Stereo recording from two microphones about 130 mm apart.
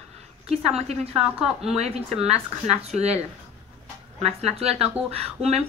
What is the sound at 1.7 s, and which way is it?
Speech, 55° right (ahead or behind).